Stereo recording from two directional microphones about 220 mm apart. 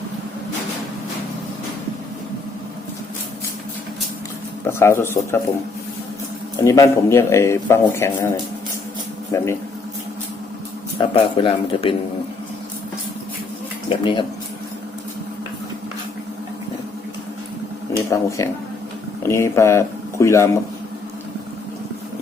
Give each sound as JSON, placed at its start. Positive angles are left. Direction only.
{"t": 4.6, "sound": "a man's voice", "side_deg": 10}
{"t": 6.6, "sound": "a man's voice", "side_deg": 15}
{"t": 9.3, "sound": "a man's voice", "side_deg": 15}
{"t": 10.9, "sound": "speech", "side_deg": 25}
{"t": 13.9, "sound": "speech", "side_deg": 20}
{"t": 18.1, "sound": "a man's voice", "side_deg": 15}